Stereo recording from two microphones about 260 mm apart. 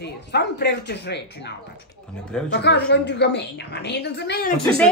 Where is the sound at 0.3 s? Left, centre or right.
Left.